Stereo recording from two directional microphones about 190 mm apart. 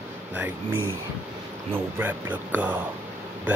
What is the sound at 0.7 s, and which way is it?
Speech, 90° right.